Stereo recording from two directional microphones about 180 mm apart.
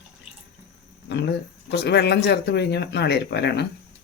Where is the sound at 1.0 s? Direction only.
70° left (ahead or behind).